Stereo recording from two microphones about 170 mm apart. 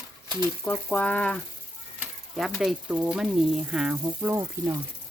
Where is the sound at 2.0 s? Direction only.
Centre (ahead or behind).